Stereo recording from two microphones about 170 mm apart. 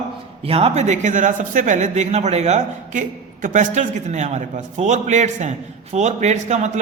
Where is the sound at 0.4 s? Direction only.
35° right (ahead or behind).